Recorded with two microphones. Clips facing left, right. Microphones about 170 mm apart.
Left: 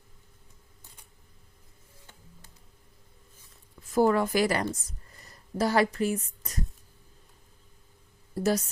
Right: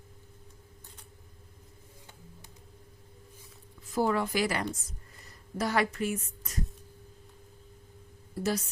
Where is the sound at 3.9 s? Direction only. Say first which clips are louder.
Left 5 dB; 45° left (ahead or behind).